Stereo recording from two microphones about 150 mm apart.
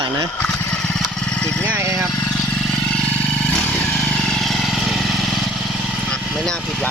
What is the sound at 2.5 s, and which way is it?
Motorcycle, 10° left (ahead or behind).